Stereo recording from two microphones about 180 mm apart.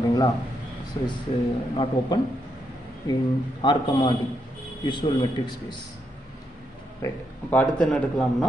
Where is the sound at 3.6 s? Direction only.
25° left (ahead or behind).